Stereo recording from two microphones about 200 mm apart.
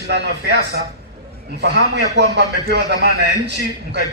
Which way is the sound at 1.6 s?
60° right (ahead or behind).